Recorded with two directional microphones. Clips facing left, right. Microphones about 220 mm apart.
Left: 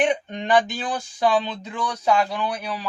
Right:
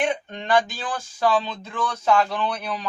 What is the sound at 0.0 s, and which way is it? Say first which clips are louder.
Speech: left 3 dB; 15° left (ahead or behind).